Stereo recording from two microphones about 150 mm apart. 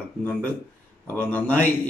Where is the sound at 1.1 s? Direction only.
10° left (ahead or behind).